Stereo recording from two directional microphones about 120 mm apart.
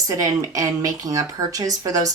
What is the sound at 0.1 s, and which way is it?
Speech, 30° right (ahead or behind).